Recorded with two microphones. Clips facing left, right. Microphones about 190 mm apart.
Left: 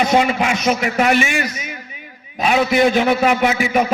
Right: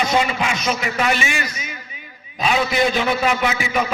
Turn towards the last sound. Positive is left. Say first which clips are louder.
# left 5 dB
turn(degrees=50)  # may be behind; listen again after turning